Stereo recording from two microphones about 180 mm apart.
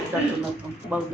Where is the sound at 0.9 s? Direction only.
5° right (ahead or behind).